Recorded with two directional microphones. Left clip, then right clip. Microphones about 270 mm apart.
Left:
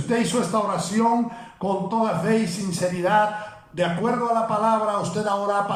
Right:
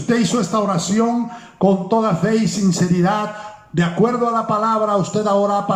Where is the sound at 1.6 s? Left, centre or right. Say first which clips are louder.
Right 7 dB; right.